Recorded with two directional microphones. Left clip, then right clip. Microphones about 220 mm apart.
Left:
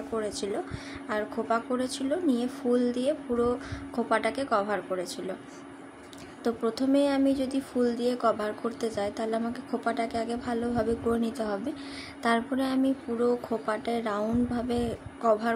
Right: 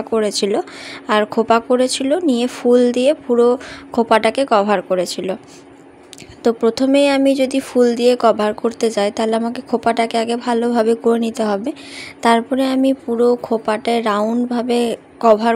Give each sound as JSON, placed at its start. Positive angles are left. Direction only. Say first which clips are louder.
{"t": 0.1, "sound": "speech", "louder": "right 15 dB", "side_deg": -35}
{"t": 6.4, "sound": "speech", "louder": "right 13 dB", "side_deg": -30}